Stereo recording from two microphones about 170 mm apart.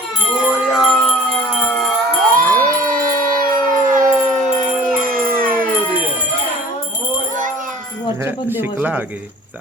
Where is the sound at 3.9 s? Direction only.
50° right (ahead or behind).